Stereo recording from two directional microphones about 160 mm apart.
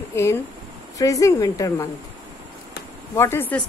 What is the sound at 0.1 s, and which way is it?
A woman's voice, 15° left (ahead or behind).